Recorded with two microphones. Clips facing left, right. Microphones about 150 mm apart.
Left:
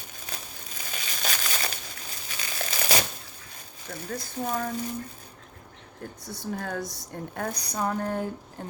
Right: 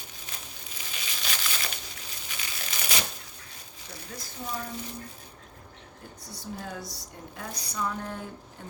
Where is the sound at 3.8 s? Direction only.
50° left (ahead or behind).